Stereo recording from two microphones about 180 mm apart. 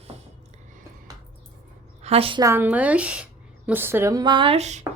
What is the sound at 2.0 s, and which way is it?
Speech, 30° right (ahead or behind).